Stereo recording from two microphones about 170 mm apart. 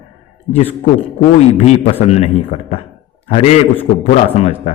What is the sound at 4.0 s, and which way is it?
Speech, 40° left (ahead or behind).